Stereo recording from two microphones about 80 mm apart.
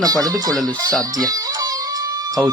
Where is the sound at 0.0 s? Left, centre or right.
Right.